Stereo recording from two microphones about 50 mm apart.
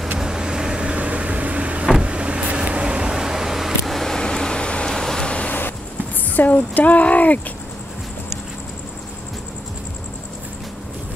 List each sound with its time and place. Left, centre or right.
0.2 s vehicle: centre
4.2 s vehicle: centre
5.5 s vehicle: left
6.3 s speech: left